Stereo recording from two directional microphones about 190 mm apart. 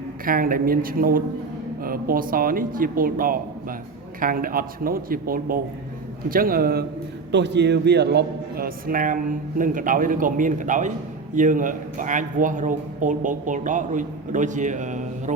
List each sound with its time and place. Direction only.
0.3 s speech: 50° right (ahead or behind)
7.3 s a man's voice: 65° right (ahead or behind); by 15.0 s 40° right (ahead or behind)